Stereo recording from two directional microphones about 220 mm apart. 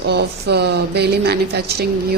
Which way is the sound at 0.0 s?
50° right (ahead or behind).